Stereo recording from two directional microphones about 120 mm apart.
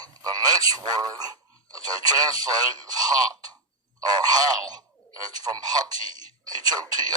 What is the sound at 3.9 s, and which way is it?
Speech, 35° right (ahead or behind).